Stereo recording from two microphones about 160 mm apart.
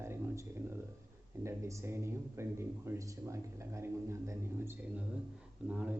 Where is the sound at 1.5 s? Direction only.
20° right (ahead or behind).